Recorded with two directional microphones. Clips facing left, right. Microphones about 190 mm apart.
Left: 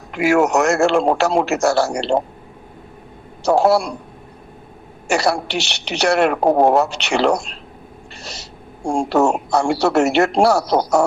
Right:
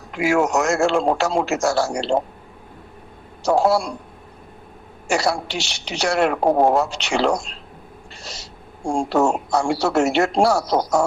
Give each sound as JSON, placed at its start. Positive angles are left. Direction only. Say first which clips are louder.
{"t": 0.1, "sound": "a woman's voice", "louder": "left 3 dB", "side_deg": 65}
{"t": 3.4, "sound": "speech", "louder": "left 3 dB", "side_deg": 65}
{"t": 5.0, "sound": "a woman's voice", "louder": "left 3 dB", "side_deg": 65}
{"t": 8.1, "sound": "gasp", "louder": "left 2 dB", "side_deg": 65}
{"t": 8.9, "sound": "speech", "louder": "left 2 dB", "side_deg": 65}